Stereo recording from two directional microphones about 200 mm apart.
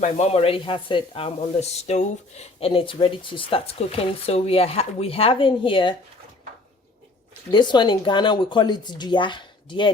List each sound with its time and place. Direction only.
0.0 s speech: 30° left (ahead or behind)
7.5 s speech: 20° left (ahead or behind)